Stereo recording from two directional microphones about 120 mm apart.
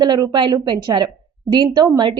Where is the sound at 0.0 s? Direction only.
35° right (ahead or behind).